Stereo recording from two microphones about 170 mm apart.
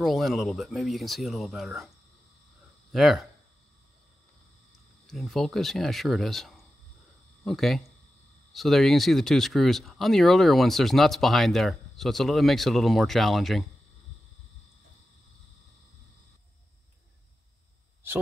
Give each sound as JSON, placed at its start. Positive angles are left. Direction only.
{"t": 0.0, "sound": "speech", "side_deg": 0}
{"t": 2.9, "sound": "speech", "side_deg": 0}
{"t": 5.0, "sound": "speech", "side_deg": 0}